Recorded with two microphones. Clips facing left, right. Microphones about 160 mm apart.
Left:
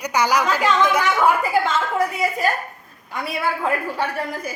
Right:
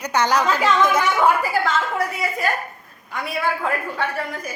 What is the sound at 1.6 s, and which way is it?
Speech, 30° left (ahead or behind).